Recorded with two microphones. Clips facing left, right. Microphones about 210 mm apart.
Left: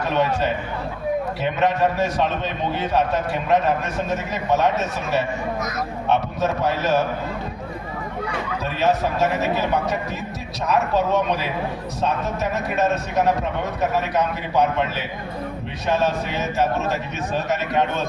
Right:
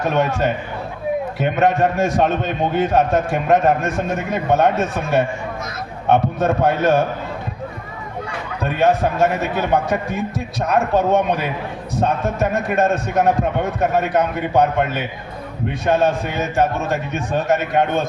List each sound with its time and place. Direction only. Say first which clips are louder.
0.0 s a man's voice: right 3 dB; 45° right (ahead or behind)
8.6 s a man's voice: right 5 dB; 50° right (ahead or behind)